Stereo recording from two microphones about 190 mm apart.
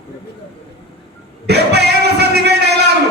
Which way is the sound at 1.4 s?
60° right (ahead or behind).